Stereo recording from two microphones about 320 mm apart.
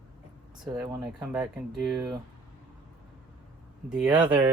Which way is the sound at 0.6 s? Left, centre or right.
Centre.